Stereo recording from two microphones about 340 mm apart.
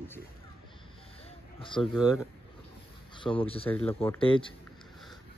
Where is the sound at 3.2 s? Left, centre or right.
Centre.